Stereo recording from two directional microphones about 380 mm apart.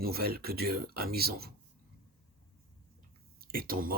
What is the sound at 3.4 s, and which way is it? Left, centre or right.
Speech, right.